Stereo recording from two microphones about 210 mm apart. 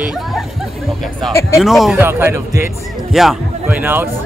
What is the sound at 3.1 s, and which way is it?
Speech, centre (ahead or behind).